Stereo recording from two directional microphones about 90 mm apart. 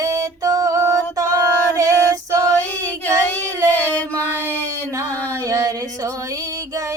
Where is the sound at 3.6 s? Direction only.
15° left (ahead or behind).